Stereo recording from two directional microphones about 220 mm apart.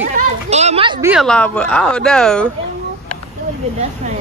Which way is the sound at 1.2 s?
5° left (ahead or behind).